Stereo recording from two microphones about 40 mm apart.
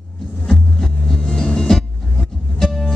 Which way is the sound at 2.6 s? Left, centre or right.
Centre.